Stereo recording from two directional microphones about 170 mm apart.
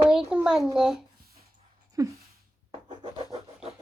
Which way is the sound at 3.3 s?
35° right (ahead or behind).